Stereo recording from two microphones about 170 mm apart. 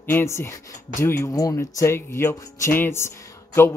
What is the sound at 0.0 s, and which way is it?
Speech, 15° left (ahead or behind).